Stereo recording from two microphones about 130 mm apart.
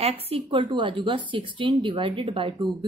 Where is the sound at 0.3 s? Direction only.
40° right (ahead or behind).